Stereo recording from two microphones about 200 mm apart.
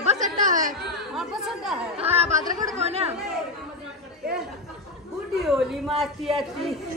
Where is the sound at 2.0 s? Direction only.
30° right (ahead or behind).